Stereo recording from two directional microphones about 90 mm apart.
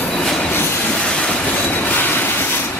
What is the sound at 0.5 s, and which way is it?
Train, 25° left (ahead or behind).